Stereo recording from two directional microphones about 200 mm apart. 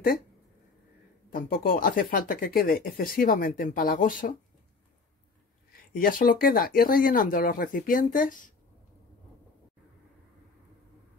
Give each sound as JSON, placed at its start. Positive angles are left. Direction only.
{"t": 1.3, "sound": "speech", "side_deg": 45}
{"t": 5.9, "sound": "speech", "side_deg": 45}